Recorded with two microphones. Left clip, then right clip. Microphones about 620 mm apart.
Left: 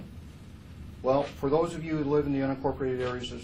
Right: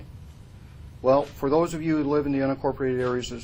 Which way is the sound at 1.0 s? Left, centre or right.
Right.